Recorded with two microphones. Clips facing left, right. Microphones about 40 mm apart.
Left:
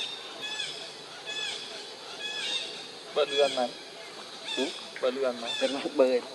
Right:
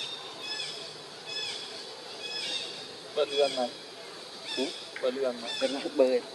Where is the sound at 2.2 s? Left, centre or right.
Left.